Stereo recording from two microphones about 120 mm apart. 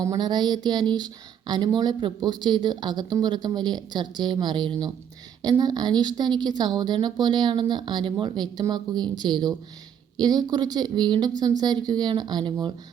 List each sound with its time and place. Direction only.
0.0 s speech: 35° right (ahead or behind)